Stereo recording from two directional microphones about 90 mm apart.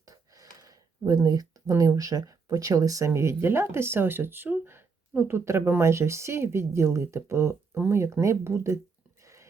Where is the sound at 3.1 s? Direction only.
30° right (ahead or behind).